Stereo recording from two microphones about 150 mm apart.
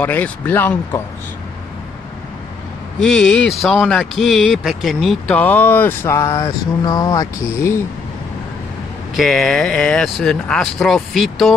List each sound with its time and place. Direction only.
0.0 s speech: 10° left (ahead or behind)
3.0 s speech: 5° left (ahead or behind)
5.4 s speech: 10° left (ahead or behind)
6.8 s speech: 25° left (ahead or behind)
9.1 s speech: centre (ahead or behind)